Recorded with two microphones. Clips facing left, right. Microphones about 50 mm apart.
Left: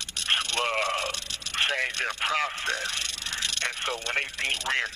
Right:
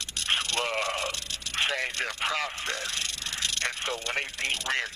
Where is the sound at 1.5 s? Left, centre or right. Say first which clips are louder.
Left 2 dB; centre.